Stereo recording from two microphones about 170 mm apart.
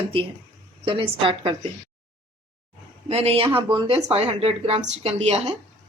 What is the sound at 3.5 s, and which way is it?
Speech, 10° right (ahead or behind).